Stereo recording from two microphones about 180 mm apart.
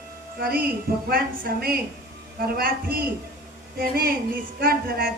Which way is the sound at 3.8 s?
60° right (ahead or behind).